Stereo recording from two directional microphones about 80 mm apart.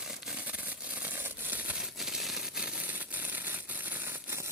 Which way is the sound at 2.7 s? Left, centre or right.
Right.